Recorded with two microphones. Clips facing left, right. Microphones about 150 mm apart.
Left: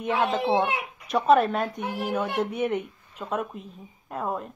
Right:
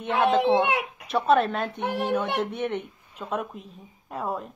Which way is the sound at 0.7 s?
80° right.